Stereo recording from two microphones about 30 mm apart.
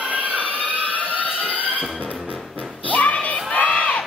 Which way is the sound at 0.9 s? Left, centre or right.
Left.